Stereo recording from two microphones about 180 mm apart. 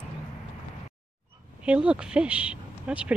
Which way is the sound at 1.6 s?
5° right (ahead or behind).